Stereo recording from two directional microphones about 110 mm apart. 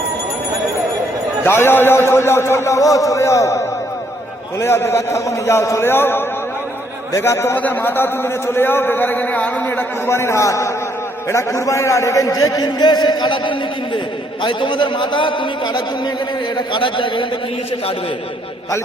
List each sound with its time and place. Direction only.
1.5 s a man's voice: 20° left (ahead or behind); by 17.2 s 50° left (ahead or behind)